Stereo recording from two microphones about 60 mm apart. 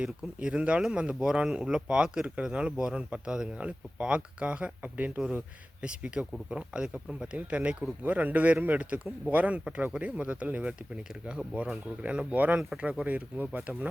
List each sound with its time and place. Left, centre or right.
0.0 s speech: centre
11.1 s speech: centre
12.3 s speech: right